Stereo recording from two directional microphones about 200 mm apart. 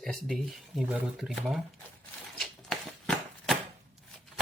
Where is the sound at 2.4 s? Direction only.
Centre (ahead or behind).